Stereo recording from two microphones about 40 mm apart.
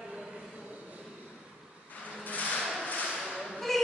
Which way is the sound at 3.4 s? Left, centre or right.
Centre.